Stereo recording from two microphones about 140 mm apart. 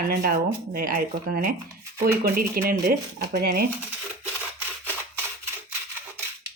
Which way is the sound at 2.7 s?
90° right.